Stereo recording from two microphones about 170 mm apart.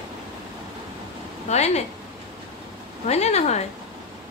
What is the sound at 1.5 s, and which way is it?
Speech, 40° left (ahead or behind).